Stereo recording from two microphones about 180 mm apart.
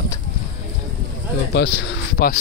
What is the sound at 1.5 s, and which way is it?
Speech, 75° left (ahead or behind).